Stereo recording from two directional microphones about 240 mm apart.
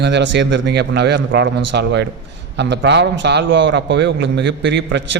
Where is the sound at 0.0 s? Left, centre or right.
Right.